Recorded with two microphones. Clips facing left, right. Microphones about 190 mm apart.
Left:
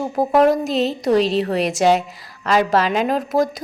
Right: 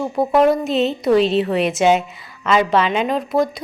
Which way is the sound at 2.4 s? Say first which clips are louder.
Right 1 dB; 40° left (ahead or behind).